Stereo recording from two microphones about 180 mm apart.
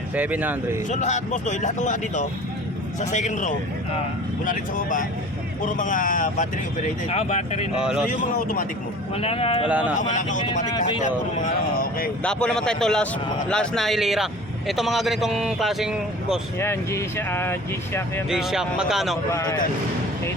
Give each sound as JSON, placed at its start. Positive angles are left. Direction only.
{"t": 0.1, "sound": "speech", "side_deg": -10}
{"t": 0.9, "sound": "speech", "side_deg": 40}
{"t": 7.8, "sound": "a man's voice", "side_deg": -5}
{"t": 8.1, "sound": "speech", "side_deg": 45}
{"t": 9.1, "sound": "speech", "side_deg": 35}
{"t": 9.6, "sound": "speech", "side_deg": -5}
{"t": 10.0, "sound": "speech", "side_deg": 45}
{"t": 10.4, "sound": "speech", "side_deg": 25}
{"t": 11.3, "sound": "speech", "side_deg": 50}
{"t": 12.2, "sound": "a man's voice", "side_deg": 5}
{"t": 16.6, "sound": "speech", "side_deg": 15}
{"t": 18.3, "sound": "a man's voice", "side_deg": -5}
{"t": 19.3, "sound": "speech", "side_deg": 20}